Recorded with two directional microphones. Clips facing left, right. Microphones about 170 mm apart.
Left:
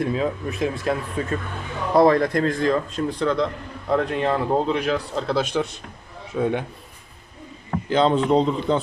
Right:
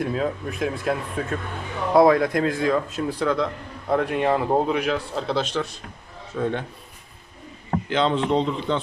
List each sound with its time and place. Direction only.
0.0 s a man's voice: centre (ahead or behind)
7.9 s a man's voice: 40° left (ahead or behind)